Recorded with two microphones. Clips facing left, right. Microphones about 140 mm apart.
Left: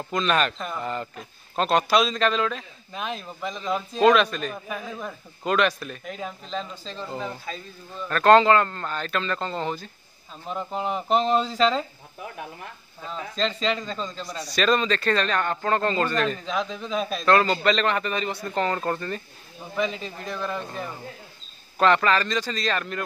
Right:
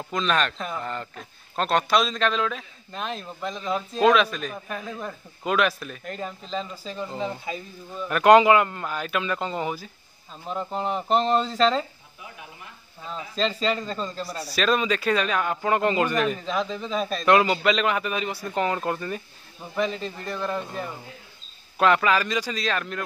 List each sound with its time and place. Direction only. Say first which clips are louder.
0.1 s speech: left 1 dB; centre (ahead or behind)
10.4 s speech: even; centre (ahead or behind)
13.1 s speech: right 1 dB; 5° right (ahead or behind)
17.3 s speech: right 1 dB; 10° right (ahead or behind)